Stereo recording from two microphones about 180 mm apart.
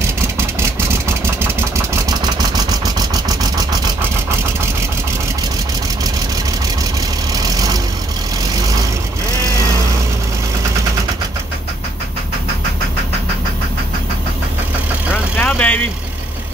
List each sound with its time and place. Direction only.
7.4 s vehicle: 20° right (ahead or behind)
15.3 s vehicle: 10° left (ahead or behind)